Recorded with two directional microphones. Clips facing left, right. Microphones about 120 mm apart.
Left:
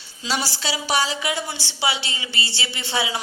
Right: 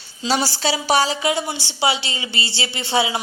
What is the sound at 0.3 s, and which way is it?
A woman's voice, 40° right (ahead or behind).